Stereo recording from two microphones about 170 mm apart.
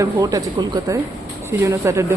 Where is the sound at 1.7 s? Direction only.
20° right (ahead or behind).